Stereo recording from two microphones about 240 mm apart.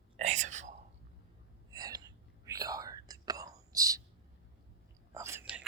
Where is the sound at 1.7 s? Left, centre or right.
Centre.